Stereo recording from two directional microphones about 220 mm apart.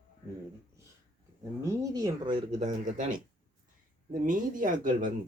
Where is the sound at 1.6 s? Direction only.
15° right (ahead or behind).